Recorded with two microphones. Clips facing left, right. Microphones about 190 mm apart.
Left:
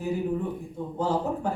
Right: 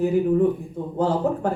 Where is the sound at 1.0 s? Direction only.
60° right (ahead or behind).